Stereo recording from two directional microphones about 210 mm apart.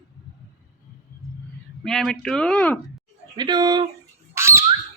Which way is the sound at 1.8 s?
Centre (ahead or behind).